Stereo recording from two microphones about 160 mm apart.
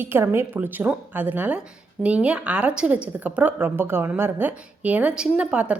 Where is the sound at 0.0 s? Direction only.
15° right (ahead or behind).